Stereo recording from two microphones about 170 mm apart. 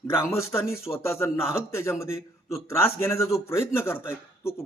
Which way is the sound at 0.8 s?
15° left (ahead or behind).